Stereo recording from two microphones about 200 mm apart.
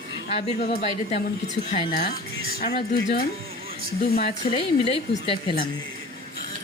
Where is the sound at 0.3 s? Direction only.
30° left (ahead or behind).